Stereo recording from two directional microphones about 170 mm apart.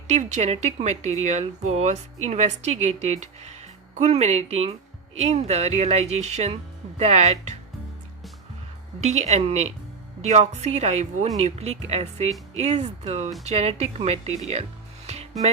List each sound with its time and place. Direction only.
0.1 s speech: 40° right (ahead or behind)
9.0 s speech: 40° right (ahead or behind)
15.0 s music: 40° right (ahead or behind)